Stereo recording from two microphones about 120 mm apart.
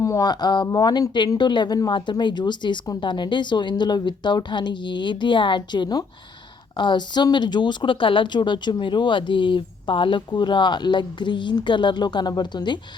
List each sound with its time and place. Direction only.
0.0 s speech: 30° left (ahead or behind)